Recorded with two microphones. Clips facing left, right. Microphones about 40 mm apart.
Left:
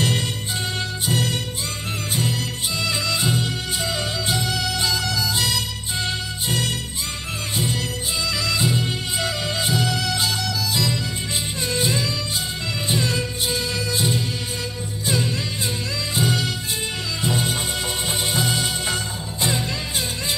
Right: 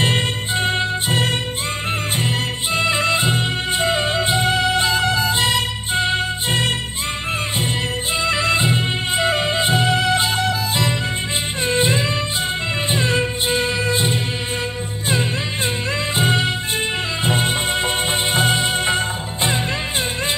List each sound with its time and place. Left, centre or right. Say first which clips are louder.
0.0 s music: right 4 dB; right
8.2 s music: right 5 dB; right
16.2 s music: right 3 dB; right